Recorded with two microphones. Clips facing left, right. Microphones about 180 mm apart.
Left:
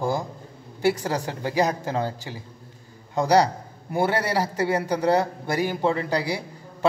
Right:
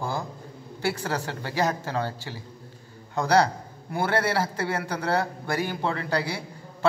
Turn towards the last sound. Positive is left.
turn(degrees=15)  # may be behind; listen again after turning